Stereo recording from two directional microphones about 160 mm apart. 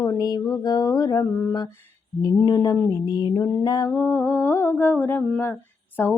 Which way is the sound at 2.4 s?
25° left (ahead or behind).